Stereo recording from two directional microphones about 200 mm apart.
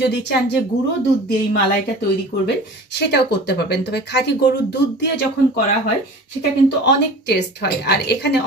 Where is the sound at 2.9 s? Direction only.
55° left (ahead or behind).